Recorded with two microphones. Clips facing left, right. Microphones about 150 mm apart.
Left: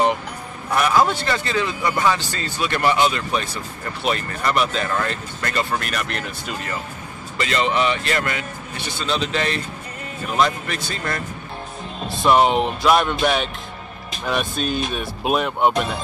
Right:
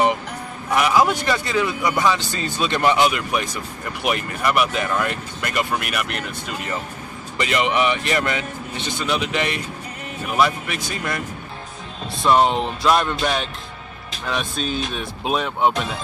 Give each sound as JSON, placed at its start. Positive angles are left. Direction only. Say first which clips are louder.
{"t": 0.7, "sound": "speech", "louder": "even", "side_deg": -10}
{"t": 12.1, "sound": "speech", "louder": "left 1 dB", "side_deg": 5}